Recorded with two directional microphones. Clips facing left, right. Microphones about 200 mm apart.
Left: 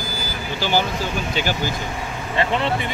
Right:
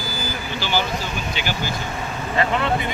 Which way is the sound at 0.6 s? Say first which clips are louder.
Left 3 dB; 45° left (ahead or behind).